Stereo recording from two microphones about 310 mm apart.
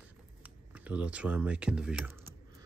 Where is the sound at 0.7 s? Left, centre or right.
Centre.